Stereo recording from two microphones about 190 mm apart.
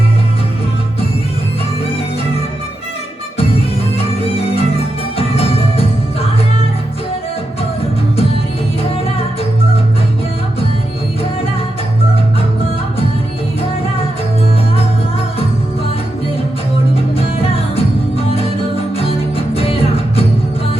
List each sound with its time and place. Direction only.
3.9 s music: 30° left (ahead or behind)
17.2 s music: 30° left (ahead or behind)
19.5 s music: 30° left (ahead or behind)